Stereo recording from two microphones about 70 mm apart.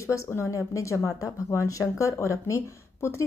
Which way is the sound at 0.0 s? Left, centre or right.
Left.